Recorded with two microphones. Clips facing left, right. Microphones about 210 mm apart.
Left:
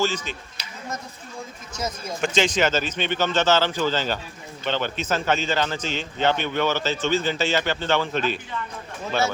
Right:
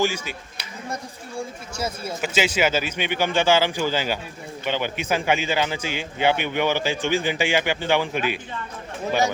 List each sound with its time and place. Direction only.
0.0 s a man's voice: 10° right (ahead or behind)
1.4 s a man's voice: 10° right (ahead or behind)